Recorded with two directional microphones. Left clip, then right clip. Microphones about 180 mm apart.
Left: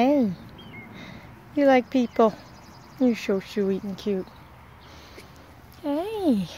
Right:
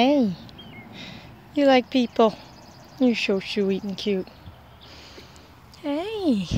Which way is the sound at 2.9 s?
5° right (ahead or behind).